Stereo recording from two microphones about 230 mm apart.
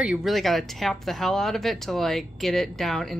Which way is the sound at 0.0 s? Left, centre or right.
Centre.